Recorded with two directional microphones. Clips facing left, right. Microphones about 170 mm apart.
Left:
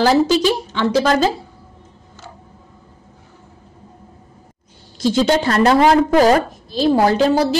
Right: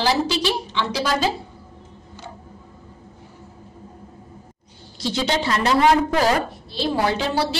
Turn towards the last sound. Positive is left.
turn(degrees=45)  # may be behind; listen again after turning